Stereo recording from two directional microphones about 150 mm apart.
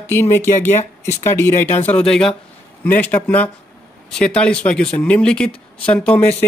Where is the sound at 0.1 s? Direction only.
15° left (ahead or behind).